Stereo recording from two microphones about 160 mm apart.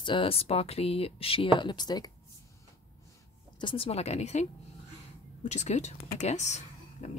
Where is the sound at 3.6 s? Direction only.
30° left (ahead or behind).